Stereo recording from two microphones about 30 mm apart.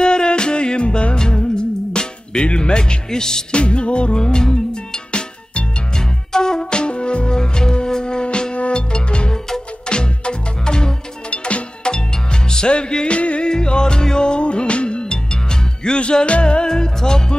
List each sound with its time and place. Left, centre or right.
0.0 s music: left
1.1 s music: left
3.5 s music: left
4.2 s music: left
5.1 s music: left
5.9 s music: left
6.6 s wind instrument: left
7.3 s music: left
11.2 s music: left
11.8 s music: left
13.5 s music: left
15.0 s music: left
16.6 s music: left